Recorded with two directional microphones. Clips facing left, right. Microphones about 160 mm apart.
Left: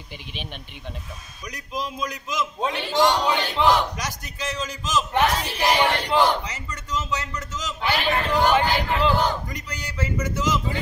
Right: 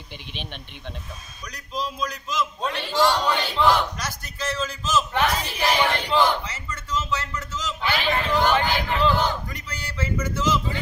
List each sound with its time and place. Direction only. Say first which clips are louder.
0.3 s speech: even; 5° left (ahead or behind)
1.4 s a man's voice: even; 20° left (ahead or behind)